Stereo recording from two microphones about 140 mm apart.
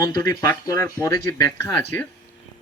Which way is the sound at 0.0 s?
30° left (ahead or behind).